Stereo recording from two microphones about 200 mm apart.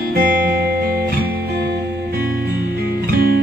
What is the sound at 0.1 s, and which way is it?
Music, 45° right (ahead or behind).